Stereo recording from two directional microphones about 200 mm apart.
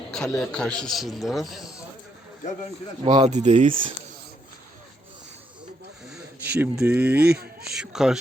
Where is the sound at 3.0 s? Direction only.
35° right (ahead or behind).